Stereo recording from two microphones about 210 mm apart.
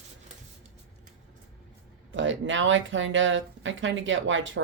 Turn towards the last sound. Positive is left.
turn(degrees=-65)  # may be behind; listen again after turning